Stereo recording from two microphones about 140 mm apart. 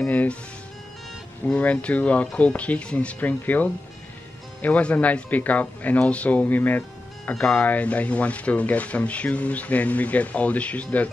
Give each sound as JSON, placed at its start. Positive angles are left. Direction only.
{"t": 0.0, "sound": "music", "side_deg": 10}
{"t": 1.4, "sound": "speech", "side_deg": 10}